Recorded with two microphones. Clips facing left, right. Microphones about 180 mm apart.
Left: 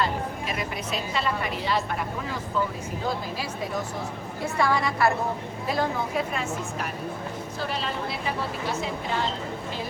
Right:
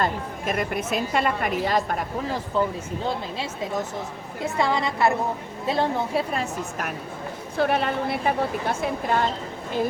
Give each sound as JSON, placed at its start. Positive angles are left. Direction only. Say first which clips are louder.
{"t": 0.0, "sound": "a woman's voice", "louder": "right 2 dB", "side_deg": -50}
{"t": 4.4, "sound": "a woman's voice", "louder": "right 1 dB", "side_deg": -20}
{"t": 7.5, "sound": "a woman's voice", "louder": "right 10 dB", "side_deg": -60}